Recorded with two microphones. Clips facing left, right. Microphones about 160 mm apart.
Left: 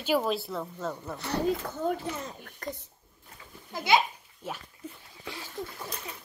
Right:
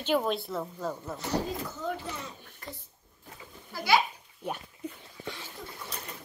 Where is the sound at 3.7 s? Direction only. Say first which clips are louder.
Left 1 dB; 20° left (ahead or behind).